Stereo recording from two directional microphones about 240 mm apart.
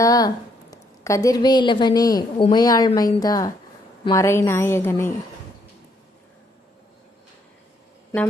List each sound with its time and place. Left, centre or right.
0.0 s a woman's voice: centre